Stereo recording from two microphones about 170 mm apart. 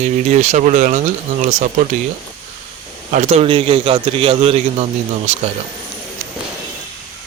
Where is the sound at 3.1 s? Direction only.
40° right (ahead or behind).